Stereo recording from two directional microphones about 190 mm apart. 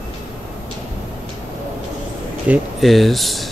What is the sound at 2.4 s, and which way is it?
Speech, 5° right (ahead or behind).